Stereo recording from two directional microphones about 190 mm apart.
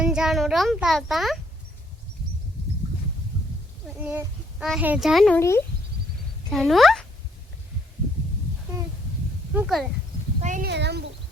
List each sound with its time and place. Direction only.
0.0 s a child's voice: 5° right (ahead or behind)
3.8 s a child's voice: 5° right (ahead or behind)
5.4 s speech: 15° left (ahead or behind)
6.5 s a child's voice: centre (ahead or behind)
9.5 s a child's voice: 5° right (ahead or behind)
10.4 s speech: 40° right (ahead or behind)
10.7 s speech: 65° right (ahead or behind)